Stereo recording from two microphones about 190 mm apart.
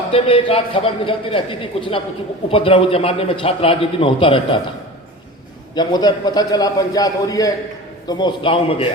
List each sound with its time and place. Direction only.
0.1 s a man's voice: 30° left (ahead or behind)
5.7 s a man's voice: 20° left (ahead or behind)